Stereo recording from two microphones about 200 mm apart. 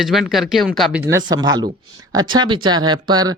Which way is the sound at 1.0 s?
20° right (ahead or behind).